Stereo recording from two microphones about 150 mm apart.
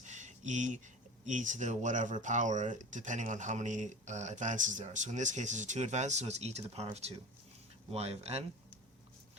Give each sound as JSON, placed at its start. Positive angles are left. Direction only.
{"t": 0.0, "sound": "a sound", "side_deg": -50}
{"t": 1.2, "sound": "speech", "side_deg": -55}
{"t": 7.9, "sound": "speech", "side_deg": -45}